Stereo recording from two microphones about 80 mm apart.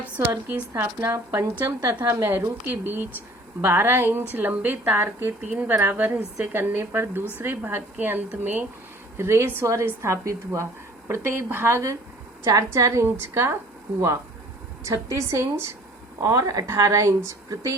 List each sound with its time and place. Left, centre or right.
0.4 s speech: right
2.6 s a woman's voice: right
9.1 s speech: right
12.5 s speech: right
14.8 s speech: right